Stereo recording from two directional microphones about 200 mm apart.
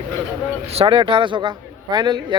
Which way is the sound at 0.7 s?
25° right (ahead or behind).